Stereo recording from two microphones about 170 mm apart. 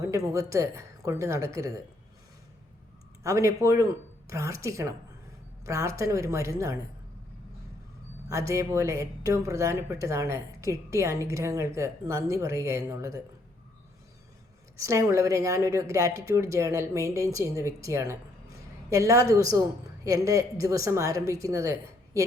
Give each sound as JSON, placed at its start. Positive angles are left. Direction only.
{"t": 0.0, "sound": "speech", "side_deg": -20}
{"t": 3.2, "sound": "speech", "side_deg": -20}
{"t": 8.3, "sound": "speech", "side_deg": -20}
{"t": 14.8, "sound": "a woman's voice", "side_deg": -20}